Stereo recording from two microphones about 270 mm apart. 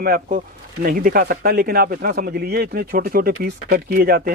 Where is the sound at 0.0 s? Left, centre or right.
Right.